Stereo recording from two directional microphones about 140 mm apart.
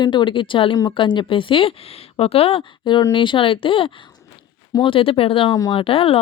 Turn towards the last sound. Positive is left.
turn(degrees=40)  # may be behind; listen again after turning